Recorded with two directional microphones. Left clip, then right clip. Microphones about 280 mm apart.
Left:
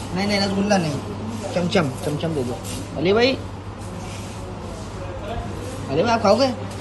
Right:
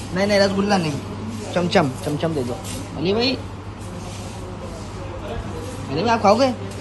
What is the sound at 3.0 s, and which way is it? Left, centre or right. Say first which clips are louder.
Speech: left 3 dB; centre.